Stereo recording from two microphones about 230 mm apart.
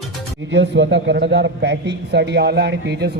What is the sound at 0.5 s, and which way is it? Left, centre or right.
A man's voice, right.